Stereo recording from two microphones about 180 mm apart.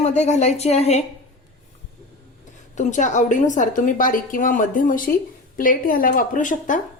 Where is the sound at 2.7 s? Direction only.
45° left (ahead or behind).